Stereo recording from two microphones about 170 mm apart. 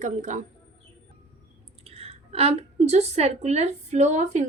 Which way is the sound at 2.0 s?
35° right (ahead or behind).